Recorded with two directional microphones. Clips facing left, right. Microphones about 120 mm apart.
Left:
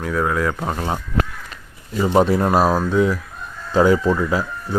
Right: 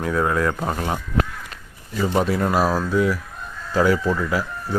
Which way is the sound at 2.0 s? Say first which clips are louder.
Left 4 dB; 30° left (ahead or behind).